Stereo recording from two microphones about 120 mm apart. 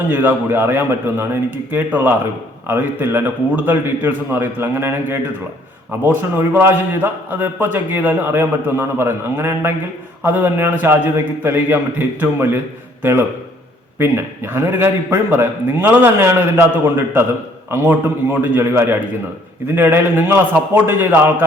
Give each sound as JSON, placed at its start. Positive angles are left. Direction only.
{"t": 0.1, "sound": "a man's voice", "side_deg": -15}